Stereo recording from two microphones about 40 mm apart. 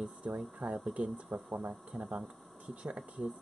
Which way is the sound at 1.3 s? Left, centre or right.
Right.